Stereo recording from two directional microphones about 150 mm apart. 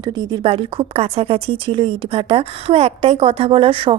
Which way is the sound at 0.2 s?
35° right (ahead or behind).